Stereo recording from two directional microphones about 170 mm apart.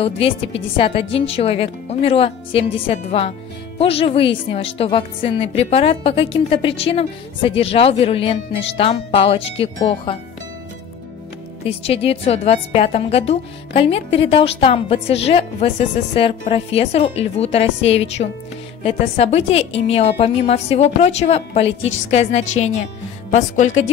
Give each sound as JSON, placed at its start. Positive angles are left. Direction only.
{"t": 0.0, "sound": "speech", "side_deg": 35}
{"t": 11.6, "sound": "a woman's voice", "side_deg": 35}